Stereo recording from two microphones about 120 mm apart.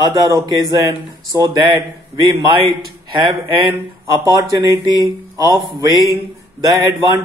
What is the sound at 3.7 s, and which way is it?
Speech, 25° right (ahead or behind).